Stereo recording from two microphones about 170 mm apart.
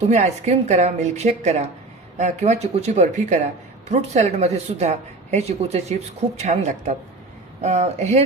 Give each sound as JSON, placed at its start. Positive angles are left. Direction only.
{"t": 0.1, "sound": "a woman's voice", "side_deg": -45}